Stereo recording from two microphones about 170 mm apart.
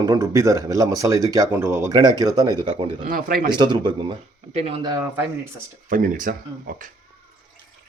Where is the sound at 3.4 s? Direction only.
25° right (ahead or behind).